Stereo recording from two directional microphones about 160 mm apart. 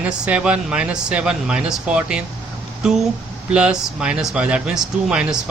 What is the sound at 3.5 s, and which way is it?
Speech, 5° right (ahead or behind).